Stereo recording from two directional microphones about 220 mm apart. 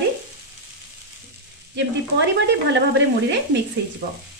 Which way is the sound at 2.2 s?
55° right (ahead or behind).